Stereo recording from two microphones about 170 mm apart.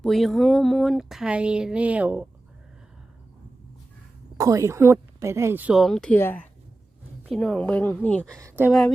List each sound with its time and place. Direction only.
0.0 s speech: centre (ahead or behind)
4.4 s a woman's voice: 20° right (ahead or behind); by 8.4 s 5° left (ahead or behind)
8.4 s a woman's voice: 15° right (ahead or behind)